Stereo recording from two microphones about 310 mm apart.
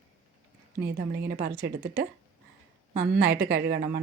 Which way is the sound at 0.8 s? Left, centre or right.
Right.